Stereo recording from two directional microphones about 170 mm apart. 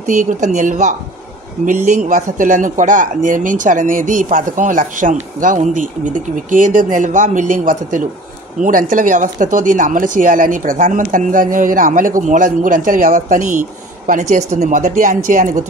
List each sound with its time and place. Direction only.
0.0 s speech: 50° right (ahead or behind)